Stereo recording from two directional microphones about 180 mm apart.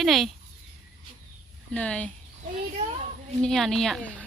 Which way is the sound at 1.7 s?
5° left (ahead or behind).